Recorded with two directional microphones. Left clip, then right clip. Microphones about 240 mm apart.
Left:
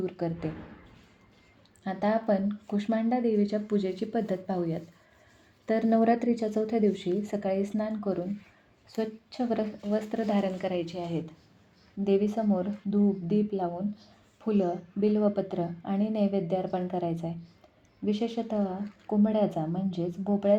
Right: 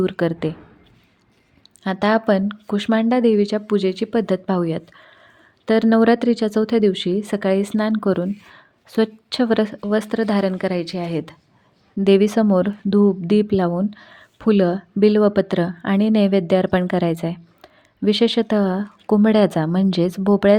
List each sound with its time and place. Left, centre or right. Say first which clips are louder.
0.0 s a woman's voice: right 12 dB; right
1.8 s a woman's voice: right 10 dB; right